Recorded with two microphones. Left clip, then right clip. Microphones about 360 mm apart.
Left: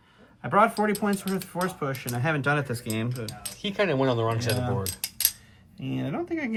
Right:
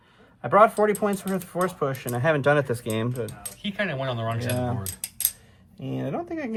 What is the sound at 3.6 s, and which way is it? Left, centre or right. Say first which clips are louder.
Speech: left 4 dB; centre.